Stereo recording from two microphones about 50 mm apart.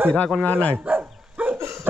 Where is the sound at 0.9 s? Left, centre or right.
Right.